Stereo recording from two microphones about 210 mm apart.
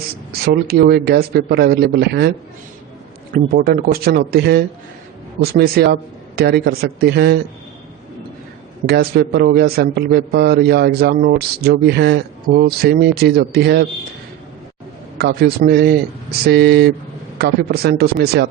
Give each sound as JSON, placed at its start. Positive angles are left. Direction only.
{"t": 0.3, "sound": "a man's voice", "side_deg": -45}
{"t": 3.3, "sound": "a man's voice", "side_deg": -45}
{"t": 8.9, "sound": "a man's voice", "side_deg": -50}
{"t": 15.2, "sound": "a man's voice", "side_deg": -50}